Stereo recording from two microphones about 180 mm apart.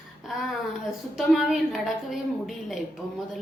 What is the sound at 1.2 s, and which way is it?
A woman's voice, centre (ahead or behind).